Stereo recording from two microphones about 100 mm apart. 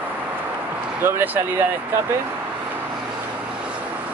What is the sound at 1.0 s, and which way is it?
Speech, 20° right (ahead or behind).